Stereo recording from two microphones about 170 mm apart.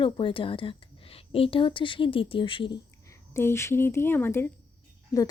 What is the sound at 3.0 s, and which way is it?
A woman's voice, 15° left (ahead or behind).